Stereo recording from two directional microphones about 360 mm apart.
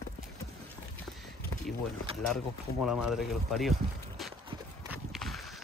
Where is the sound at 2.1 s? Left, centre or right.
Centre.